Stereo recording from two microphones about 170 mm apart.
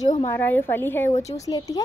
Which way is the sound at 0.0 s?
45° left (ahead or behind).